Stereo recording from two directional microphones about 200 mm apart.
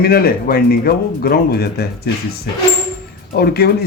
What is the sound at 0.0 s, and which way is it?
A man's voice, 50° left (ahead or behind).